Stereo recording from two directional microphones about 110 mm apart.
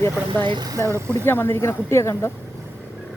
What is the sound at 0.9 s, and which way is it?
Speech, 25° right (ahead or behind).